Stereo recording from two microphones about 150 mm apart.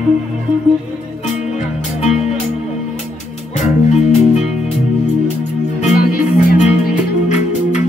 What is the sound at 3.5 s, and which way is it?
Music, 50° left (ahead or behind).